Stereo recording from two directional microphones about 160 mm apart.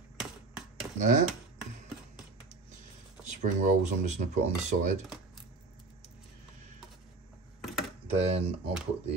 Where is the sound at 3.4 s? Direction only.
50° right (ahead or behind).